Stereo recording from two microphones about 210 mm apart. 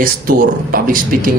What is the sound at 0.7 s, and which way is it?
Speech, 40° right (ahead or behind).